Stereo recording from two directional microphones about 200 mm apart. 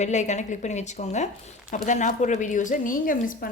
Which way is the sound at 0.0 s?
35° left (ahead or behind).